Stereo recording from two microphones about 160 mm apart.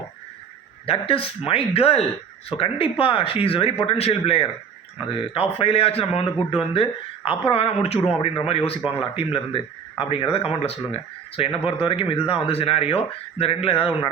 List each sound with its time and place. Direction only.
0.9 s speech: 35° left (ahead or behind)